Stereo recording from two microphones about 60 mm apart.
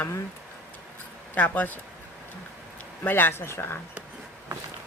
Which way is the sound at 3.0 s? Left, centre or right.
Left.